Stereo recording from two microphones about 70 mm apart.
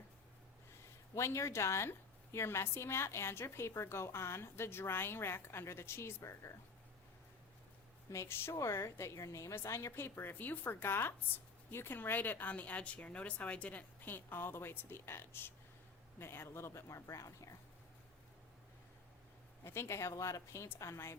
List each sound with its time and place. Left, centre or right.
1.1 s a woman's voice: left
8.1 s a woman's voice: left
19.6 s a woman's voice: left